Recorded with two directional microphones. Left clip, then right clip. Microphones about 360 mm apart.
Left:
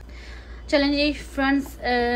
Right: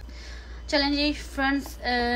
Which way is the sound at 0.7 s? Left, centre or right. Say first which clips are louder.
Left 3 dB; centre.